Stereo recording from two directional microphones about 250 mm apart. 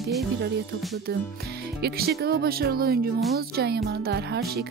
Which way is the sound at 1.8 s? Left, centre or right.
Right.